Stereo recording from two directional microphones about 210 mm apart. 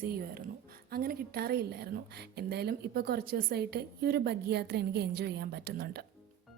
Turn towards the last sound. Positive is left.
turn(degrees=-45)  # may be behind; listen again after turning